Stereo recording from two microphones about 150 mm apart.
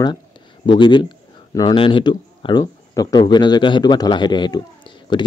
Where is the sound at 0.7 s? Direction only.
30° left (ahead or behind).